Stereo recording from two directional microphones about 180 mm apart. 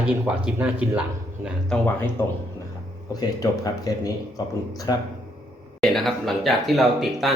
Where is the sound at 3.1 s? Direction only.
20° left (ahead or behind).